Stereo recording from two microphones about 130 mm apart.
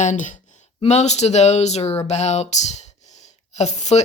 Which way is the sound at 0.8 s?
60° left (ahead or behind).